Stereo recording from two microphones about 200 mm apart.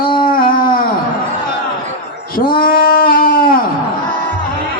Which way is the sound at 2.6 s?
45° left (ahead or behind).